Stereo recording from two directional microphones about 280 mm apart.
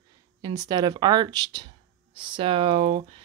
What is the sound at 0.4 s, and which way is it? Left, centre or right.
Speech, centre.